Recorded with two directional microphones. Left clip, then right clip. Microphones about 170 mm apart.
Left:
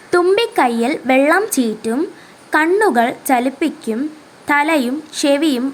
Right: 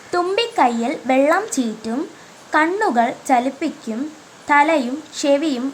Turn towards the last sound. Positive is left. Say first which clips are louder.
# left 3 dB
turn(degrees=20)  # may be behind; listen again after turning